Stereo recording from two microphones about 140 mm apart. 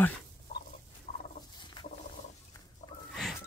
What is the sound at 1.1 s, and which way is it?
Turkey, 65° left (ahead or behind).